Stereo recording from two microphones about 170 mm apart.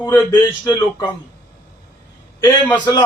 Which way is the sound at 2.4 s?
10° left (ahead or behind).